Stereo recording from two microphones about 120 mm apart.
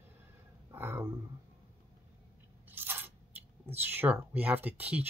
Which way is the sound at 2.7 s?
15° right (ahead or behind).